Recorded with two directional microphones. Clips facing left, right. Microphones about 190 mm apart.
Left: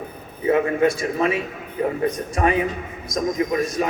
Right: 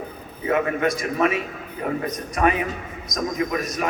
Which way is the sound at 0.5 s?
30° left (ahead or behind).